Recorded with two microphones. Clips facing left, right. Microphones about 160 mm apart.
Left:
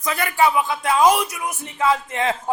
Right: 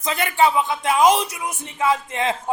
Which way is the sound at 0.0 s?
25° right (ahead or behind).